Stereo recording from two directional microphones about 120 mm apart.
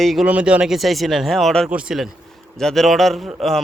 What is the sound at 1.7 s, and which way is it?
Speech, 10° right (ahead or behind).